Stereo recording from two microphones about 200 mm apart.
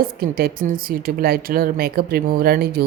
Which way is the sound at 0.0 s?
50° right (ahead or behind).